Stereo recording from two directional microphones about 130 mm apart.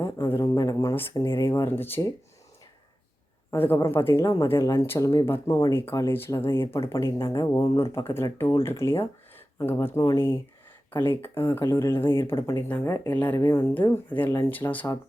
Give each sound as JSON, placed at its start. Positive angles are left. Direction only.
{"t": 0.3, "sound": "a sound", "side_deg": 20}
{"t": 1.1, "sound": "speech", "side_deg": 20}
{"t": 3.5, "sound": "speech", "side_deg": 20}
{"t": 13.3, "sound": "speech", "side_deg": 25}